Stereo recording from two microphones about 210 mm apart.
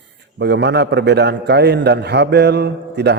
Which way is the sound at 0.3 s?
55° right (ahead or behind).